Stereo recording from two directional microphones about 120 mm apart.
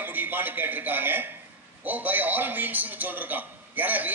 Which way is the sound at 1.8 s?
15° right (ahead or behind).